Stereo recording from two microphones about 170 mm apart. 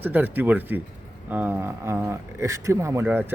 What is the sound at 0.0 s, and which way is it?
A man's voice, 10° right (ahead or behind).